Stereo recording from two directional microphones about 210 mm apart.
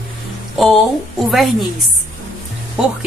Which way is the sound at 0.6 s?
Centre (ahead or behind).